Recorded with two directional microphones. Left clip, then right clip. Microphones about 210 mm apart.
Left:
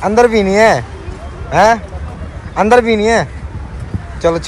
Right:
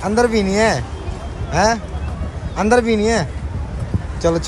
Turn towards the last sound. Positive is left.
turn(degrees=-15)  # may be behind; listen again after turning